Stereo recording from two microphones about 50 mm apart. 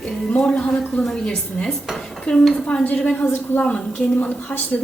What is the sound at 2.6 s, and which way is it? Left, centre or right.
A woman's voice, left.